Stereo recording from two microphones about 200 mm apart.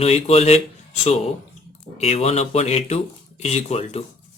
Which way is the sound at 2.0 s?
30° left (ahead or behind).